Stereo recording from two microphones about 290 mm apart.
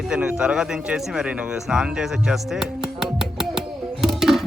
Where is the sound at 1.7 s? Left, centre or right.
Centre.